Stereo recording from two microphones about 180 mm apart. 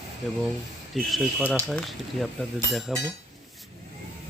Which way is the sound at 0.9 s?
Centre (ahead or behind).